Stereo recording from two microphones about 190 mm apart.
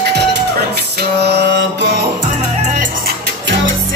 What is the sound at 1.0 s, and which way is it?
Mantra, 60° right (ahead or behind).